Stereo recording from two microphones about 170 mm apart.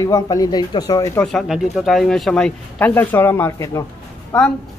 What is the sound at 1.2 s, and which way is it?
Speech, centre (ahead or behind).